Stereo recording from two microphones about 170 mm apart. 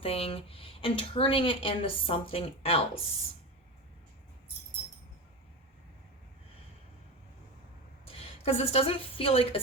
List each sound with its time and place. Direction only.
0.0 s speech: 35° left (ahead or behind)
8.0 s a woman's voice: 35° left (ahead or behind)